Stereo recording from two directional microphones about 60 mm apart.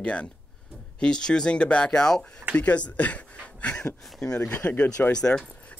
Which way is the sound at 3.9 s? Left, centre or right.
Centre.